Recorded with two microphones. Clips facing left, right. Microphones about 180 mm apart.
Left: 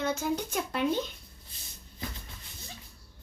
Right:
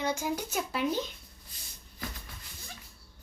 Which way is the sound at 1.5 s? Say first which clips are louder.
Even; 25° left (ahead or behind).